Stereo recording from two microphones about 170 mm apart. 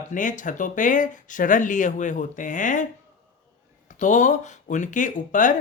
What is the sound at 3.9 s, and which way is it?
Speech, 45° left (ahead or behind).